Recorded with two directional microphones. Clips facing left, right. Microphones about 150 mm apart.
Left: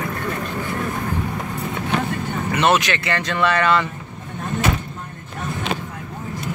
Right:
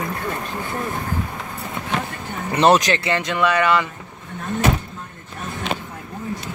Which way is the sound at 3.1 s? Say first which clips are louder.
Left 1 dB; 15° right (ahead or behind).